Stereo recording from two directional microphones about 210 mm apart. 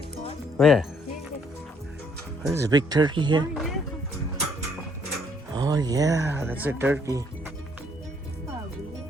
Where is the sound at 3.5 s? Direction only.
Centre (ahead or behind).